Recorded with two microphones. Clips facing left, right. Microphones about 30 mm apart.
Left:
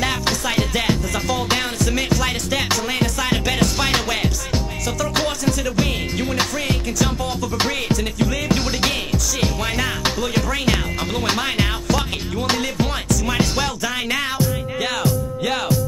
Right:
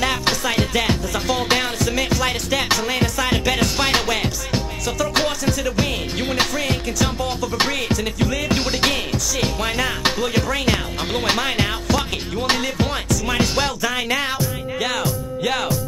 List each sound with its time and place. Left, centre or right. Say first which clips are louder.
0.0 s music: right 1 dB; centre
1.2 s music: right 2 dB; right
1.6 s music: right 1 dB; centre
13.9 s music: even; centre